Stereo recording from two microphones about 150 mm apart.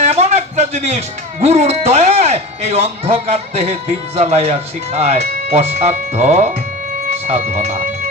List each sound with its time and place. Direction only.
0.0 s speech: 45° right (ahead or behind)